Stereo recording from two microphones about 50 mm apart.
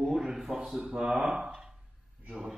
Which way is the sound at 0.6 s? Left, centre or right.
Right.